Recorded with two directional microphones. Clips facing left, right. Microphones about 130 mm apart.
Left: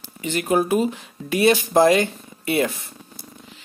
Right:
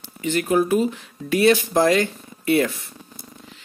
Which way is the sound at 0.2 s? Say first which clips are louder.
Right 1 dB; 20° left (ahead or behind).